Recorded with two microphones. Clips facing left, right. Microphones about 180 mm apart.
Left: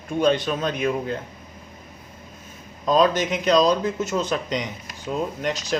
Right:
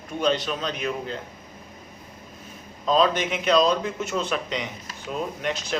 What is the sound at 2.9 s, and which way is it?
A man's voice, 45° left (ahead or behind).